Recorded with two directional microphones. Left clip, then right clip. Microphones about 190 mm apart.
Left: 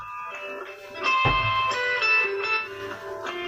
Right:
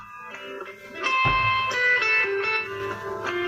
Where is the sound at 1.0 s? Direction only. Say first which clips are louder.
Even; 35° right (ahead or behind).